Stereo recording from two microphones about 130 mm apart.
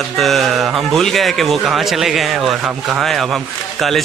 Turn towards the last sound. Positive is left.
turn(degrees=0)  # may be behind; listen again after turning